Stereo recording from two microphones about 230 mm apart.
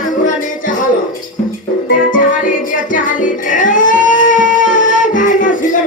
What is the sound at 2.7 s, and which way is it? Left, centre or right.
Music, left.